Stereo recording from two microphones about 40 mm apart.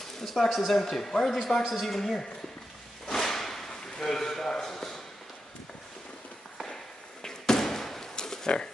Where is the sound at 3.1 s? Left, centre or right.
Centre.